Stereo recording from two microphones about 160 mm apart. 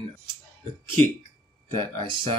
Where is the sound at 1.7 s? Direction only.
30° right (ahead or behind).